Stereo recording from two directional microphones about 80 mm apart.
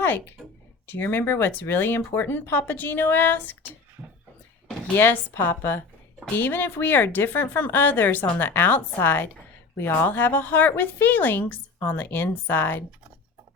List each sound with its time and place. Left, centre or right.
0.9 s a woman's voice: left
4.9 s a woman's voice: left